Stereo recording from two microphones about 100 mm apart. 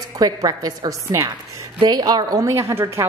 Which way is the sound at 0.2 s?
40° right (ahead or behind).